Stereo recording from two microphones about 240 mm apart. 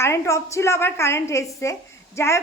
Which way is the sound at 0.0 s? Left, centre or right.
Centre.